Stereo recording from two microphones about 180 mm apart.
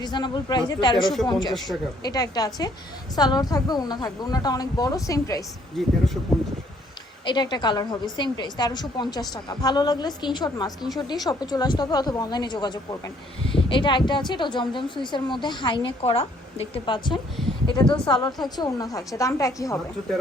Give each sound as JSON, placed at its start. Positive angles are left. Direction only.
{"t": 0.0, "sound": "speech", "side_deg": 25}
{"t": 1.0, "sound": "a woman's voice", "side_deg": 0}
{"t": 1.3, "sound": "speech", "side_deg": 25}
{"t": 5.8, "sound": "a woman's voice", "side_deg": 0}
{"t": 7.3, "sound": "speech", "side_deg": 25}
{"t": 17.8, "sound": "a woman's voice", "side_deg": 5}
{"t": 18.1, "sound": "speech", "side_deg": 20}